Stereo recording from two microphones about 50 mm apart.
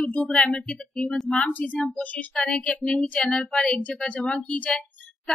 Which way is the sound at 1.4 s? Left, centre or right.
Left.